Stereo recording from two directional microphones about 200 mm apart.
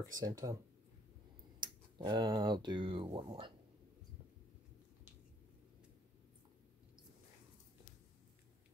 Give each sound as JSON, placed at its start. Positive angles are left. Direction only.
{"t": 0.1, "sound": "speech", "side_deg": -15}
{"t": 1.6, "sound": "speech", "side_deg": -20}